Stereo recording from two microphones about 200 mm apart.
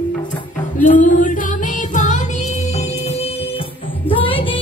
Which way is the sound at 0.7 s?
40° left (ahead or behind).